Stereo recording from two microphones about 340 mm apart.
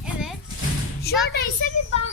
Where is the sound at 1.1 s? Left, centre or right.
Left.